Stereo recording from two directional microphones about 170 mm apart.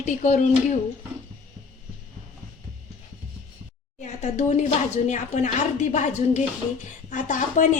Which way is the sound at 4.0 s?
45° left (ahead or behind).